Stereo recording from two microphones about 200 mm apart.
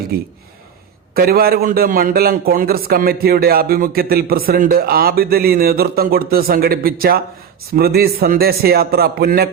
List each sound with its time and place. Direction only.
0.1 s a man's voice: 50° right (ahead or behind)